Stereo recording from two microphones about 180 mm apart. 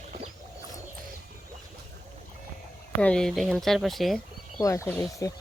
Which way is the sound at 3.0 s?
5° left (ahead or behind).